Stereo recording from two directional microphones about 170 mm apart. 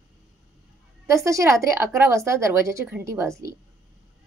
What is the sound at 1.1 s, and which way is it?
A woman's voice, 20° right (ahead or behind).